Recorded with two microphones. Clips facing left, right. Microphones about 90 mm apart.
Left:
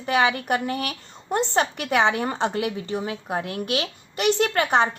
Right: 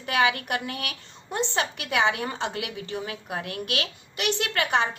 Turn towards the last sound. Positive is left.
turn(degrees=45)  # may be behind; listen again after turning